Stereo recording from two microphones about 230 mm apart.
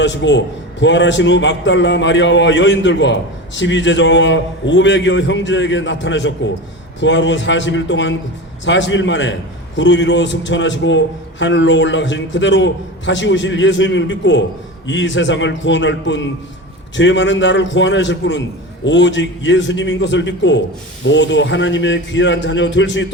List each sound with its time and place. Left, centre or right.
0.0 s a man's voice: left